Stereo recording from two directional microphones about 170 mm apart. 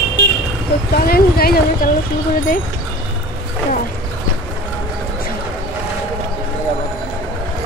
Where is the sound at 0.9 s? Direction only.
60° left (ahead or behind).